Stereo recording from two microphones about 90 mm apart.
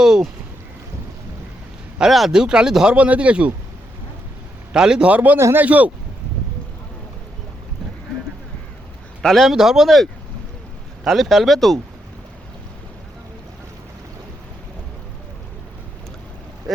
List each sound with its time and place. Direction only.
0.0 s speech: 5° right (ahead or behind)
2.0 s speech: centre (ahead or behind)
4.7 s speech: 10° right (ahead or behind)
5.4 s speech: 30° right (ahead or behind)
5.6 s speech: 15° right (ahead or behind)
9.2 s speech: centre (ahead or behind)
16.7 s speech: centre (ahead or behind)